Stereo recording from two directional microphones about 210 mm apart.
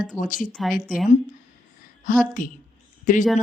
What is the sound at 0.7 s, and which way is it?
Speech, 40° left (ahead or behind).